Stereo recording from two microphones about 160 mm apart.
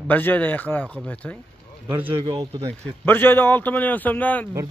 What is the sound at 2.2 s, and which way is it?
Speech, 40° right (ahead or behind).